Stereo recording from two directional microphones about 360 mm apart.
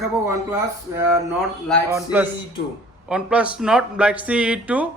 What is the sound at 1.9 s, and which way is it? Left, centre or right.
A man's voice, centre.